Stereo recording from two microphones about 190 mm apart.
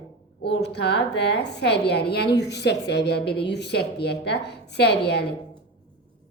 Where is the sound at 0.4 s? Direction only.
60° left (ahead or behind).